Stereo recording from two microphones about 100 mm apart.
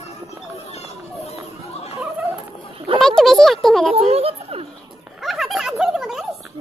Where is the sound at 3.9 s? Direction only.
80° right.